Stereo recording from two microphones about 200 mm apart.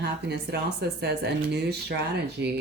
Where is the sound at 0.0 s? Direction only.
55° right (ahead or behind).